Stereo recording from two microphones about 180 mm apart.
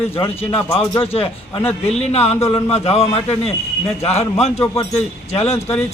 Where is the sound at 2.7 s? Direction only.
35° left (ahead or behind).